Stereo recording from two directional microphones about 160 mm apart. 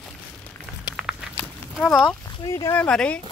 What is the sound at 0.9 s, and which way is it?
Walk, 5° right (ahead or behind).